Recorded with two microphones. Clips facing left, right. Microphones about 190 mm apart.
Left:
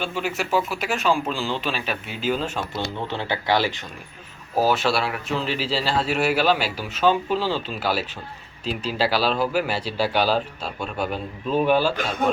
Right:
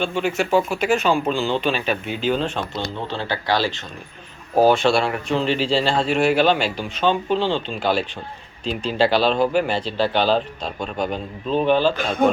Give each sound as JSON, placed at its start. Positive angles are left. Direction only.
{"t": 0.0, "sound": "speech", "side_deg": 5}
{"t": 3.1, "sound": "speech", "side_deg": 20}
{"t": 4.6, "sound": "speech", "side_deg": 5}